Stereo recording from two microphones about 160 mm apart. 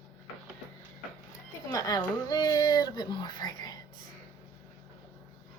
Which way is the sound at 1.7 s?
20° left (ahead or behind).